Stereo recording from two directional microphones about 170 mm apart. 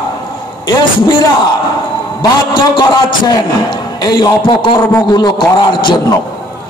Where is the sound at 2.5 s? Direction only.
25° left (ahead or behind).